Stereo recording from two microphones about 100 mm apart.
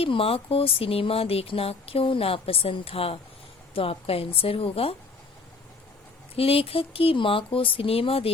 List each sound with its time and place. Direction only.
0.0 s speech: 70° left (ahead or behind)
6.3 s speech: 75° left (ahead or behind)